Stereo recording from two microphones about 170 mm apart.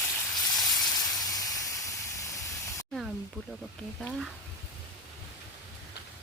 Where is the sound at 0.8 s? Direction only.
20° left (ahead or behind).